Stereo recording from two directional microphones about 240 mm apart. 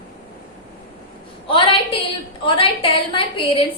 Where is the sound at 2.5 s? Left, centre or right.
Left.